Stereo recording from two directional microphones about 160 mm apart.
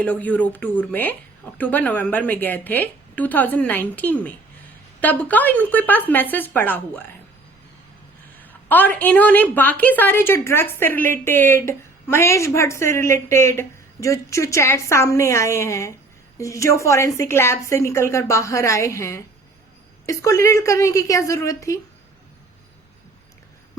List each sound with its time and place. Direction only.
0.0 s a woman's voice: 10° left (ahead or behind)
8.4 s a woman's voice: 10° left (ahead or behind)